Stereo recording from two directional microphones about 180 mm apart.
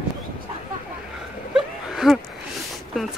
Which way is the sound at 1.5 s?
Centre (ahead or behind).